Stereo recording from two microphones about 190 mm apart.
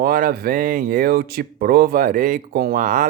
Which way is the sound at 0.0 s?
50° right (ahead or behind).